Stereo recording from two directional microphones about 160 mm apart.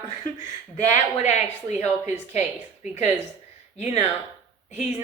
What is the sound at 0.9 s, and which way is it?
Speech, 45° left (ahead or behind).